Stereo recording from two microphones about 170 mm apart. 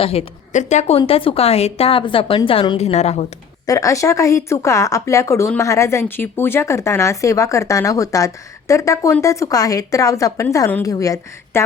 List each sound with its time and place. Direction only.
0.0 s a woman's voice: 35° left (ahead or behind)
3.7 s a woman's voice: 20° left (ahead or behind)